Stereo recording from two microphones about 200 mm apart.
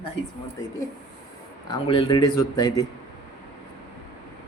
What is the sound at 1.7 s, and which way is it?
A man's voice, 25° left (ahead or behind).